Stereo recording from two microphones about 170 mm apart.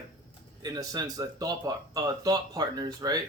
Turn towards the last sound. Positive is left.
turn(degrees=-20)  # may be behind; listen again after turning